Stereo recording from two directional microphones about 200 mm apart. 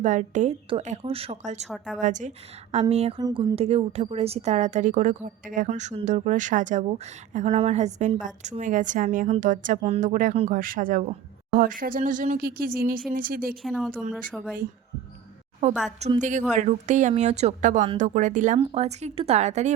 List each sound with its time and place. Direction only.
0.0 s a woman's voice: 40° right (ahead or behind)
1.6 s speech: centre (ahead or behind)
2.0 s a woman's voice: 40° right (ahead or behind)
3.2 s speech: 20° right (ahead or behind)
3.5 s a woman's voice: 30° right (ahead or behind); by 13.6 s 45° right (ahead or behind)
13.6 s speech: centre (ahead or behind)
16.0 s a woman's voice: 35° right (ahead or behind)